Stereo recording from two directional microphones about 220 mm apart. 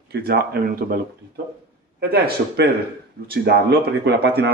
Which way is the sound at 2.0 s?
45° right (ahead or behind).